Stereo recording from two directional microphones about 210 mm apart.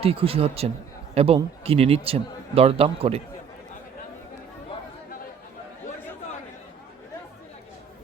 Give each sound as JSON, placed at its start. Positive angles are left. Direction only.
{"t": 0.0, "sound": "a man's voice", "side_deg": -25}